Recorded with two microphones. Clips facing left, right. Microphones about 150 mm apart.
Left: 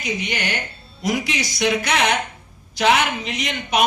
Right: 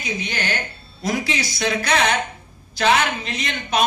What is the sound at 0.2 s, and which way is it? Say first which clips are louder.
A woman's voice: even; 15° left (ahead or behind).